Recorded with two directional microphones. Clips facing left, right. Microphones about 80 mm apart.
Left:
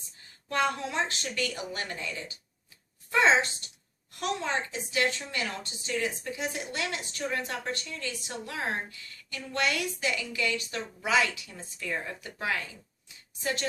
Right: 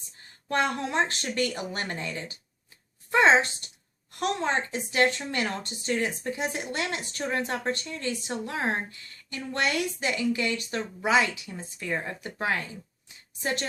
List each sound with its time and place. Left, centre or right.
0.4 s a woman's voice: right